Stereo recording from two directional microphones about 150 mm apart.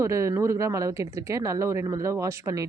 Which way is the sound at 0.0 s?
20° right (ahead or behind).